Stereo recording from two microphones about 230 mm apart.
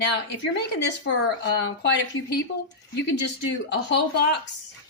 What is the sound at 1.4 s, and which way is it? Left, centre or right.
Speech, left.